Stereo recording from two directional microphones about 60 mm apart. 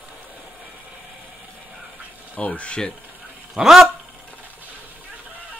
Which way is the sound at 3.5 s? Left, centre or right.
Centre.